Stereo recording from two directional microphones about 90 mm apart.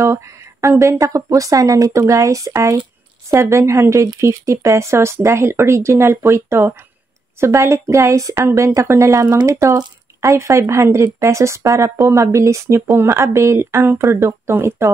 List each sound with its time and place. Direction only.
0.0 s speech: 35° right (ahead or behind)